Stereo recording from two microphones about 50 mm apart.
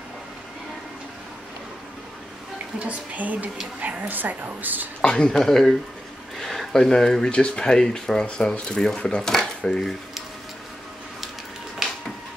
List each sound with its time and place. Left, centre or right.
2.8 s a woman's voice: right
5.0 s speech: centre
11.8 s a sound: centre